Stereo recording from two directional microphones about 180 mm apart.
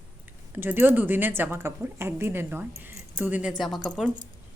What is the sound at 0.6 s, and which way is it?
Speech, 10° right (ahead or behind).